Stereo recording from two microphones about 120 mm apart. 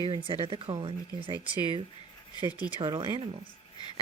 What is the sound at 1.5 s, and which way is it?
Speech, 35° left (ahead or behind).